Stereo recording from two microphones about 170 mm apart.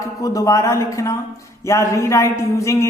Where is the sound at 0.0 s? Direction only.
20° left (ahead or behind).